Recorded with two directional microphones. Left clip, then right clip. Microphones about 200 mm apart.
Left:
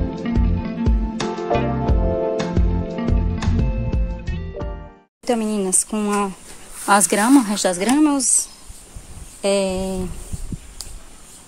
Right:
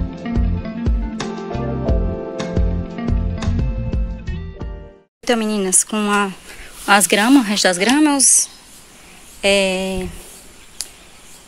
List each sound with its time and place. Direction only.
0.1 s music: centre (ahead or behind)
5.2 s speech: 5° right (ahead or behind)
10.8 s a sound: centre (ahead or behind)